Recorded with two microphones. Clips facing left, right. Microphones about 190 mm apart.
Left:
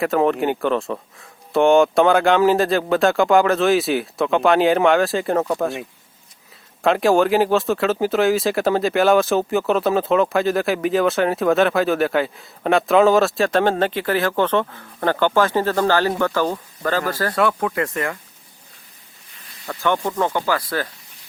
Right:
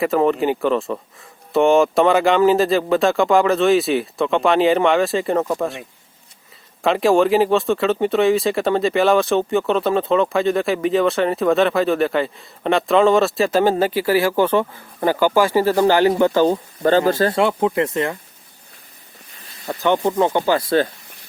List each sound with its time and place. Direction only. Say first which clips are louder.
0.0 s speech: right 1 dB; centre (ahead or behind)
6.8 s speech: right 1 dB; centre (ahead or behind); by 18.2 s 20° right (ahead or behind)
19.6 s speech: right 3 dB; 20° right (ahead or behind)